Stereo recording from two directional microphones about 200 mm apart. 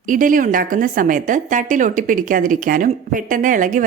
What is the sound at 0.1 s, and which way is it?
A woman's voice, 40° right (ahead or behind).